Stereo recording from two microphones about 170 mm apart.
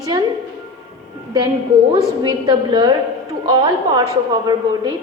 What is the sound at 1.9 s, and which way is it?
A woman's voice, 25° right (ahead or behind).